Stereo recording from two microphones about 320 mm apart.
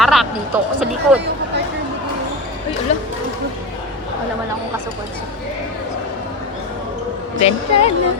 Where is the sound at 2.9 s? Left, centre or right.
Left.